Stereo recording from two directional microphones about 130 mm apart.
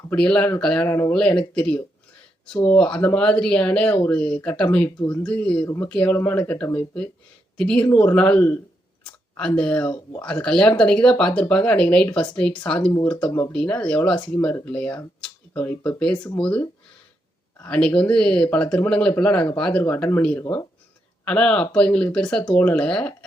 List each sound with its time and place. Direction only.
0.1 s speech: 10° left (ahead or behind)
0.9 s speech: 20° left (ahead or behind)
1.1 s speech: 5° left (ahead or behind)
5.6 s speech: 20° left (ahead or behind)
5.9 s speech: 5° left (ahead or behind)